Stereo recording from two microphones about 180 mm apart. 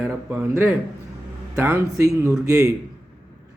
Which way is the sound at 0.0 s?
10° right (ahead or behind).